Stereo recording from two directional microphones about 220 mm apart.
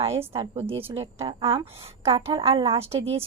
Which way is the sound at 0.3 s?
25° right (ahead or behind).